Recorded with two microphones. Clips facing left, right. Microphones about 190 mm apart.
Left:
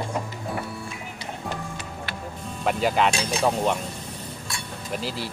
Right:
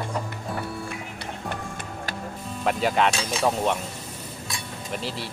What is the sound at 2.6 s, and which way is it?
Speech, centre (ahead or behind).